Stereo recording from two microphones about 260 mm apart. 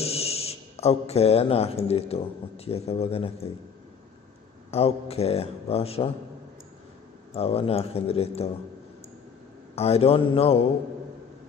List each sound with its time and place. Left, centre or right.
0.0 s speech: left
4.6 s speech: left
7.3 s speech: left
9.8 s speech: left